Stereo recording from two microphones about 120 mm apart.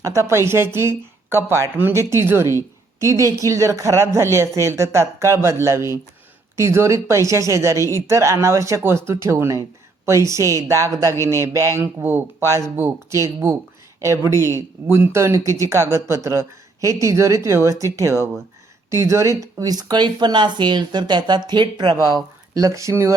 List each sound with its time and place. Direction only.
0.0 s speech: 25° right (ahead or behind)